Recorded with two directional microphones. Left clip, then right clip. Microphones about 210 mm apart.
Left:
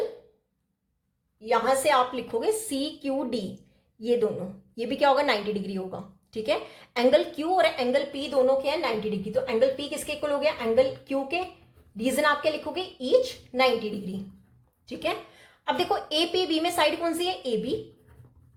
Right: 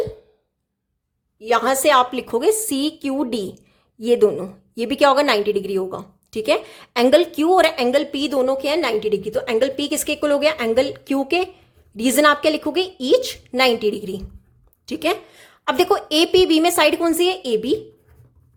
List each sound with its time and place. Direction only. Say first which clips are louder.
1.4 s a woman's voice: right 6 dB; 45° right (ahead or behind)